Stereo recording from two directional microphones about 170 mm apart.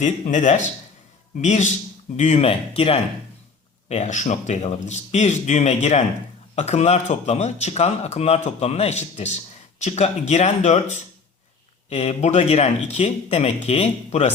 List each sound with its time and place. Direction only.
0.0 s speech: 45° left (ahead or behind)